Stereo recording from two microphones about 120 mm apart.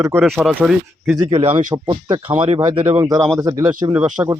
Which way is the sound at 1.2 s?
45° right (ahead or behind).